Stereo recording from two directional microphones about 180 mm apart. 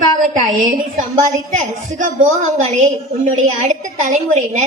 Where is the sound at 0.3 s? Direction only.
45° right (ahead or behind).